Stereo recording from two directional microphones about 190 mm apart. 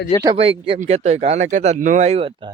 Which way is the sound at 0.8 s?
35° right (ahead or behind).